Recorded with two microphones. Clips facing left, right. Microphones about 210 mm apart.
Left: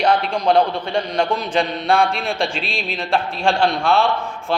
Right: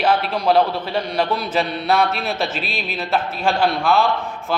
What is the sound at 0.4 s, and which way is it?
A man's voice, 5° right (ahead or behind).